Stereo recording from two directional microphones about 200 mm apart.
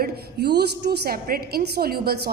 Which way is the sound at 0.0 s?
55° right (ahead or behind).